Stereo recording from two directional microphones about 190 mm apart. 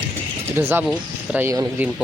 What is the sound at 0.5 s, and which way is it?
Speech, 10° right (ahead or behind).